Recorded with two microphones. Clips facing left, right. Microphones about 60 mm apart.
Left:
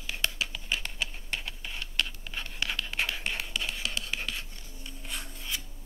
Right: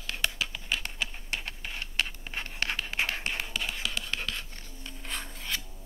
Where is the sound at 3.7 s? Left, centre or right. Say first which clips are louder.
Right 1 dB; centre.